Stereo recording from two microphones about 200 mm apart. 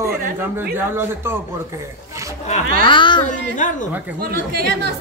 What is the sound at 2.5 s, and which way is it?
Speech, 25° left (ahead or behind).